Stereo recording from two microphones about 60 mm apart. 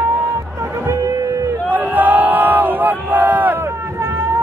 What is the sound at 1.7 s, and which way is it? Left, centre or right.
Crowd, right.